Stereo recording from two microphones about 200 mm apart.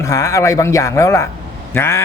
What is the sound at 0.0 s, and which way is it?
A man's voice, 15° left (ahead or behind).